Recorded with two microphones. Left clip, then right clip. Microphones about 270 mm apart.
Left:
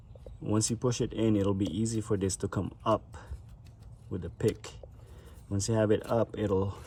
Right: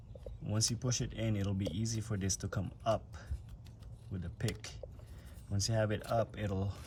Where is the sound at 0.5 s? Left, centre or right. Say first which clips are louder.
Left 6 dB; centre.